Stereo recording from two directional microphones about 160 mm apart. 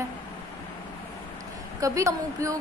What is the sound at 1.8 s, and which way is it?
Speech, 20° right (ahead or behind).